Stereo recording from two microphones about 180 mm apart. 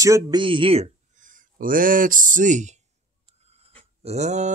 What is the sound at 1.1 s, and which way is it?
Speech, 45° right (ahead or behind).